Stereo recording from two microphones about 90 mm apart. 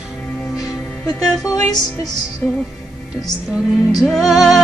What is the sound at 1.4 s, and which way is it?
Music, 45° left (ahead or behind).